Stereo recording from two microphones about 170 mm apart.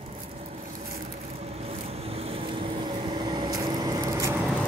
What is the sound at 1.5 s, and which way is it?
Vehicle, 35° right (ahead or behind).